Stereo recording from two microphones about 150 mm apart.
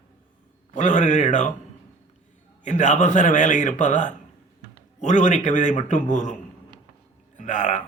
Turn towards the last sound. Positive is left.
turn(degrees=55)  # may be behind; listen again after turning